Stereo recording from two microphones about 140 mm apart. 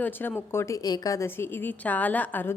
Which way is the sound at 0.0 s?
15° left (ahead or behind).